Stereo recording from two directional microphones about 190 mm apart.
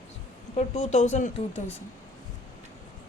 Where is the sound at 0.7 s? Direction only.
35° left (ahead or behind).